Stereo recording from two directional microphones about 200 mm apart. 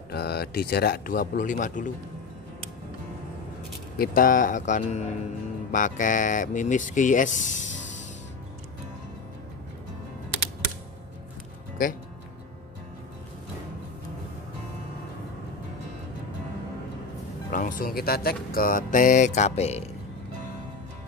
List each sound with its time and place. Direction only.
0.1 s speech: 50° left (ahead or behind)
4.0 s speech: 45° left (ahead or behind)
17.5 s speech: 40° left (ahead or behind)